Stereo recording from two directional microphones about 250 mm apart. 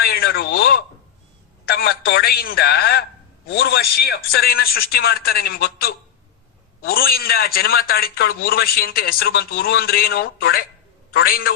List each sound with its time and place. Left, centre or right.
0.0 s a man's voice: left
6.9 s a man's voice: left